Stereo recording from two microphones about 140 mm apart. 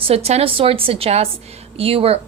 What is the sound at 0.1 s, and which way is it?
A woman's voice, 45° right (ahead or behind).